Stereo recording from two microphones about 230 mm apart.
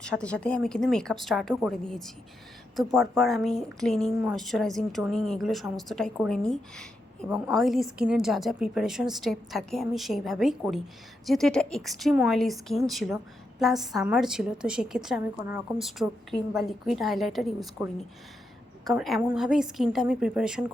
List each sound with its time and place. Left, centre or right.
0.0 s a woman's voice: centre
18.9 s a woman's voice: centre